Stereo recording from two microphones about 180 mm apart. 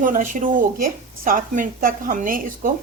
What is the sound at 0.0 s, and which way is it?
A woman's voice, 45° right (ahead or behind).